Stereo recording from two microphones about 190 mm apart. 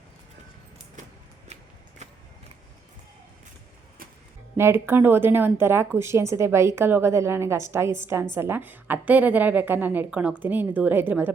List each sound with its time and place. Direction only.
2.0 s vehicle: 35° right (ahead or behind)
4.5 s speech: 15° right (ahead or behind)